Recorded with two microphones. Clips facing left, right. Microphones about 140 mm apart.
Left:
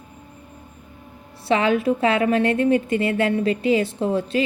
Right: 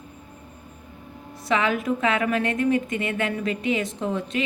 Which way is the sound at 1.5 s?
30° left (ahead or behind).